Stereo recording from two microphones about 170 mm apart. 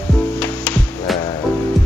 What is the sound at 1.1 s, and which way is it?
Music, centre (ahead or behind).